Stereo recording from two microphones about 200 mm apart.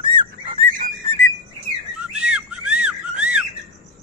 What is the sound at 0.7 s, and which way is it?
Whistle, 40° right (ahead or behind).